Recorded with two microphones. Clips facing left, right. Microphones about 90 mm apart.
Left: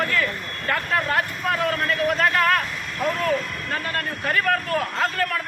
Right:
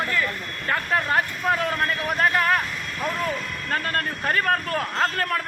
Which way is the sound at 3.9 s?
35° right (ahead or behind).